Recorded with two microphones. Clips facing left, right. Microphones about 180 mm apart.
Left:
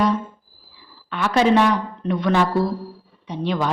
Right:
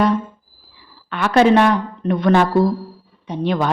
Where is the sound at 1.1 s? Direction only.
60° right (ahead or behind).